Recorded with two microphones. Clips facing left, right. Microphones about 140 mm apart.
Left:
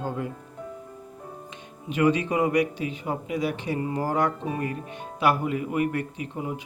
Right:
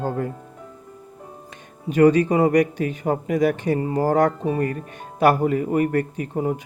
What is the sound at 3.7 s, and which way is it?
Music, 35° right (ahead or behind).